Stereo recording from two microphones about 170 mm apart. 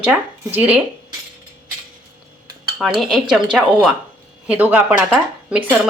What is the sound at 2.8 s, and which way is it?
A woman's voice, centre (ahead or behind).